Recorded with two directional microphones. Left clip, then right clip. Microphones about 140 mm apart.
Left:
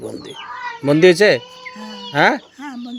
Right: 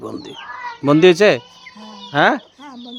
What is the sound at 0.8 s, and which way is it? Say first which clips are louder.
Speech: even; 20° right (ahead or behind).